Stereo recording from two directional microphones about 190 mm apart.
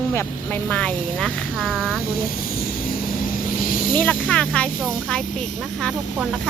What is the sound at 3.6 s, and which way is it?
Vehicle, 45° left (ahead or behind).